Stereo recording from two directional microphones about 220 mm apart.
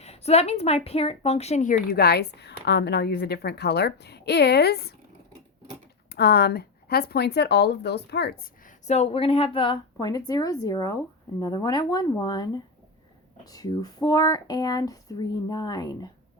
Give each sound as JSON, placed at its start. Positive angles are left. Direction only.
{"t": 0.0, "sound": "a woman's voice", "side_deg": 30}
{"t": 6.1, "sound": "a woman's voice", "side_deg": 45}
{"t": 8.9, "sound": "speech", "side_deg": 30}